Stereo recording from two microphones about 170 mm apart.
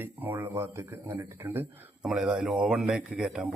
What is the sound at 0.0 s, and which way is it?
Speech, 10° right (ahead or behind).